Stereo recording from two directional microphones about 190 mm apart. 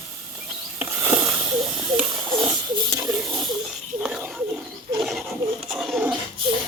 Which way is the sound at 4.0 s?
5° right (ahead or behind).